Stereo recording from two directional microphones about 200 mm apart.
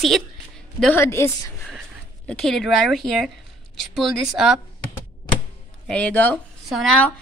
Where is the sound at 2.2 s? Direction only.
Centre (ahead or behind).